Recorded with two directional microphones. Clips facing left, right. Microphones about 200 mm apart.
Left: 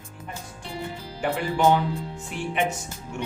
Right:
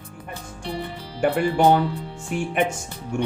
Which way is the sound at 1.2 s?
55° right (ahead or behind).